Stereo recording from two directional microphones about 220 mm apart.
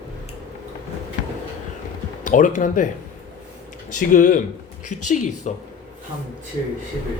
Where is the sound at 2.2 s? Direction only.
35° left (ahead or behind).